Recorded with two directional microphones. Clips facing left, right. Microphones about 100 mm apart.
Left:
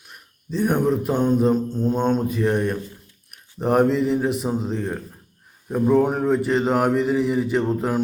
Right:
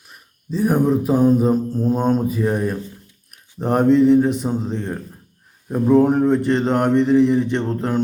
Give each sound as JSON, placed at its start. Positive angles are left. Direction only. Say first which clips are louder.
{"t": 0.1, "sound": "mantra", "louder": "right 2 dB", "side_deg": 0}